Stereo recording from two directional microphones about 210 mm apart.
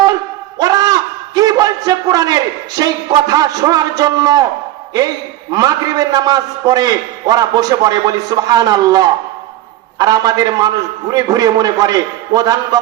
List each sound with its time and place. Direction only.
0.6 s a sound: 20° right (ahead or behind)
1.4 s a man's voice: 15° right (ahead or behind)
5.5 s a man's voice: 20° right (ahead or behind)